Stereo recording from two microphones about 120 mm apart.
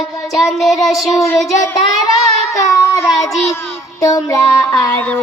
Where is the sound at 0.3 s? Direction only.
Centre (ahead or behind).